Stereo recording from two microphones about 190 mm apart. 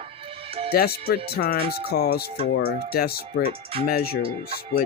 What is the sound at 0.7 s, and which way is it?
Speech, 55° left (ahead or behind).